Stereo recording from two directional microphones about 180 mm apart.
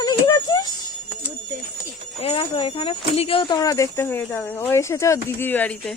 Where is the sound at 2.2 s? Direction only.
30° left (ahead or behind); by 5.9 s 10° left (ahead or behind).